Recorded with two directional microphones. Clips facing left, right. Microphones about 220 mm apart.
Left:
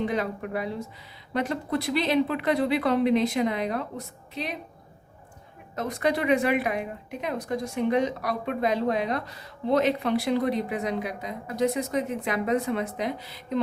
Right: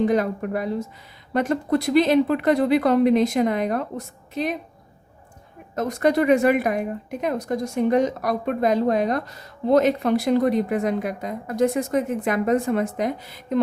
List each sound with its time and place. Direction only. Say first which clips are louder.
0.0 s a woman's voice: right 7 dB; 45° right (ahead or behind)
5.7 s a woman's voice: right 6 dB; 45° right (ahead or behind)